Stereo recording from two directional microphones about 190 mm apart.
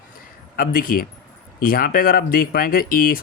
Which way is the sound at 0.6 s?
50° left (ahead or behind).